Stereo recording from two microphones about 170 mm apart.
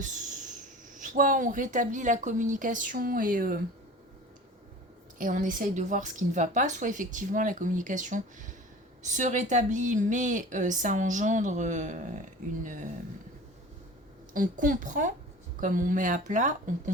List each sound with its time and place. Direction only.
0.9 s a woman's voice: 50° right (ahead or behind)
5.1 s a woman's voice: 50° right (ahead or behind)
14.3 s a woman's voice: 50° right (ahead or behind)